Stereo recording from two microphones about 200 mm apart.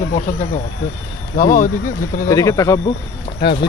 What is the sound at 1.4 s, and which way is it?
Speech, 45° left (ahead or behind).